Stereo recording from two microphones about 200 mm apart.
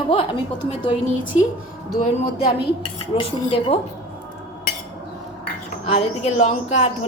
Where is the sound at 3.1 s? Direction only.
30° left (ahead or behind).